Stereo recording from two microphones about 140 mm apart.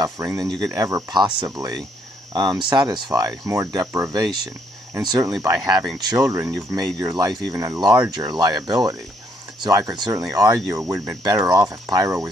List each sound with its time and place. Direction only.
0.0 s cricket: 30° right (ahead or behind)